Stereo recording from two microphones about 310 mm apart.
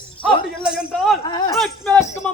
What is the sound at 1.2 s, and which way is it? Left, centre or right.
Speech, centre.